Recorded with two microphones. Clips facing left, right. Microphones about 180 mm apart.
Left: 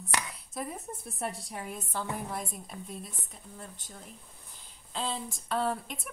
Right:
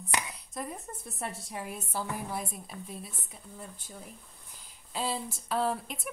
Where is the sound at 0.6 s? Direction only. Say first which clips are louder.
Left 1 dB; centre (ahead or behind).